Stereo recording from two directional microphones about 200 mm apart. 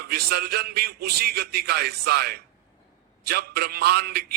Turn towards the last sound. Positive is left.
turn(degrees=-50)  # may be behind; listen again after turning